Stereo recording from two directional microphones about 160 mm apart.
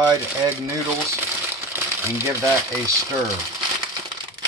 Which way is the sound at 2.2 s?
20° right (ahead or behind).